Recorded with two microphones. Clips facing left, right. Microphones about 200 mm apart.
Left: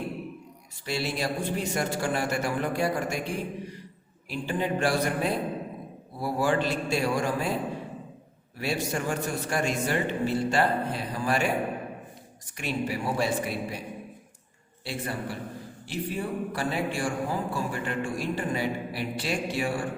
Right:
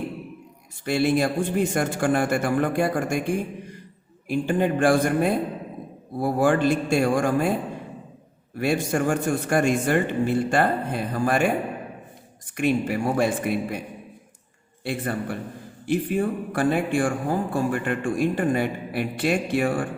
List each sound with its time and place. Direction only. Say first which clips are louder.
0.9 s speech: right 8 dB; 50° right (ahead or behind)
8.5 s speech: right 7 dB; 50° right (ahead or behind)
12.5 s speech: right 8 dB; 50° right (ahead or behind)
14.8 s speech: right 6 dB; 55° right (ahead or behind)